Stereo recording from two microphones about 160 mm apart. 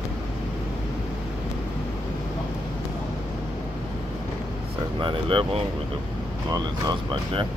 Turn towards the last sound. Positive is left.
turn(degrees=-25)  # may be behind; listen again after turning